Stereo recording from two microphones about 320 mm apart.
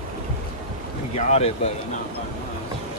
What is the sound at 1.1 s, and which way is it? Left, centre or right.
Speech, centre.